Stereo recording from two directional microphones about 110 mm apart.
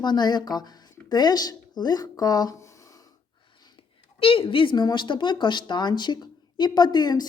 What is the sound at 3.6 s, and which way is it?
A woman's voice, 55° left (ahead or behind).